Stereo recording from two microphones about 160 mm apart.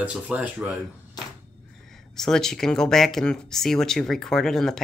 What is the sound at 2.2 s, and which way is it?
Speech, 5° left (ahead or behind).